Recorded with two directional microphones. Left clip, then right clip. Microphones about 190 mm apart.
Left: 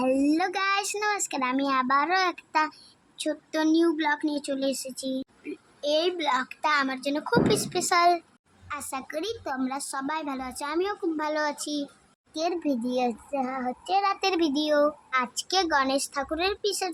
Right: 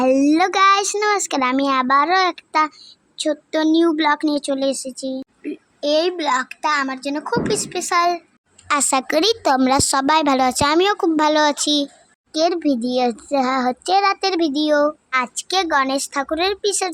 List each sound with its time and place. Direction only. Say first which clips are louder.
0.0 s a child's voice: right 9 dB; 30° right (ahead or behind); by 8.2 s 10° right (ahead or behind)
8.6 s a woman's voice: right 16 dB; 50° right (ahead or behind)
12.3 s a child's voice: right 10 dB; 25° right (ahead or behind)